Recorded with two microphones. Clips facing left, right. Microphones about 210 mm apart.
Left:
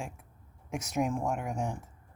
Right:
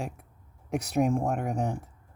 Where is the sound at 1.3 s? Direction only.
35° right (ahead or behind).